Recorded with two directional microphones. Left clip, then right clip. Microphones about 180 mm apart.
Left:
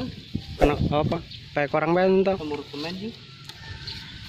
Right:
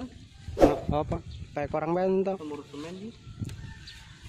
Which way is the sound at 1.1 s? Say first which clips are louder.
Left 7 dB; 5° right (ahead or behind).